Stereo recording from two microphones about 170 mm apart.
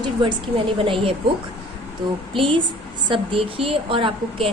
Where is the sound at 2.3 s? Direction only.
30° right (ahead or behind).